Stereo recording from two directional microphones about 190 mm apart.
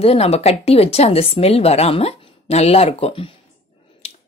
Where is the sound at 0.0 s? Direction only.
30° left (ahead or behind).